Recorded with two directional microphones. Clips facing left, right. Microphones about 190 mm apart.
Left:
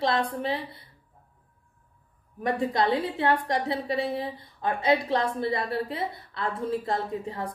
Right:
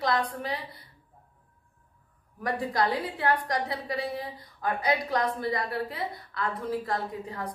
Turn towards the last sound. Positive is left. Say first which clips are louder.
# left 3 dB
turn(degrees=25)  # may be behind; listen again after turning